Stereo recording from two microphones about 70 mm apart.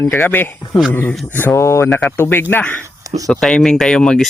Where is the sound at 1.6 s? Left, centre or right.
Left.